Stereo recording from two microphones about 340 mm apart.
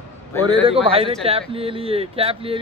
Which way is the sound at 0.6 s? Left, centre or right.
Centre.